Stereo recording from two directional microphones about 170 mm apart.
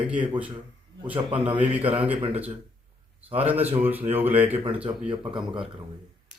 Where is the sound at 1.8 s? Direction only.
35° right (ahead or behind).